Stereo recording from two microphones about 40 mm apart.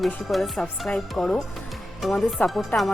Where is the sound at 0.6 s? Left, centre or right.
Centre.